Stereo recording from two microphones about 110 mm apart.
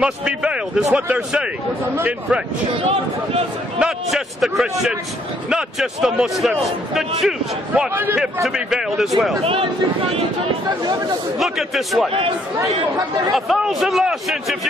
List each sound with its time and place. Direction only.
0.0 s a man's voice: 10° right (ahead or behind)
3.8 s a man's voice: centre (ahead or behind)
7.9 s a man's voice: 20° right (ahead or behind)
8.5 s a man's voice: 5° right (ahead or behind)
9.4 s speech: 55° right (ahead or behind)
11.3 s a man's voice: centre (ahead or behind)
13.3 s a man's voice: centre (ahead or behind)